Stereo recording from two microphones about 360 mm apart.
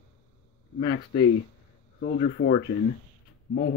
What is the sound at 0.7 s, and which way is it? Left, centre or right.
Speech, left.